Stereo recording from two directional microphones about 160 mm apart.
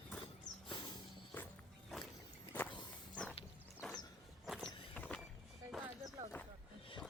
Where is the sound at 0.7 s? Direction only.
30° left (ahead or behind).